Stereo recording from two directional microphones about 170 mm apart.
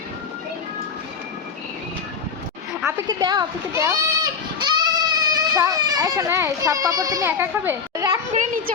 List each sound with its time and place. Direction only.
2.8 s a child's voice: 25° right (ahead or behind)